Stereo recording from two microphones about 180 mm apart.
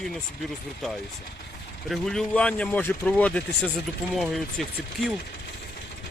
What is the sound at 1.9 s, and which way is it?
Speech, 5° left (ahead or behind).